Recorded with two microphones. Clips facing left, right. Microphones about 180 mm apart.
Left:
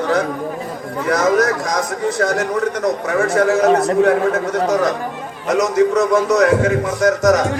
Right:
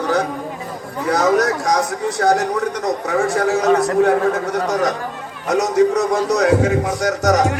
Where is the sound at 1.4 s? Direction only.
65° right (ahead or behind).